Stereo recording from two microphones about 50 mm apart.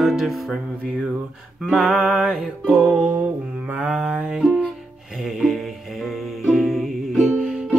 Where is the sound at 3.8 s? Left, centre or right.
Centre.